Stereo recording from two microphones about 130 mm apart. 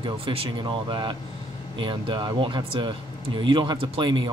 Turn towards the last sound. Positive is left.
turn(degrees=-40)  # may be behind; listen again after turning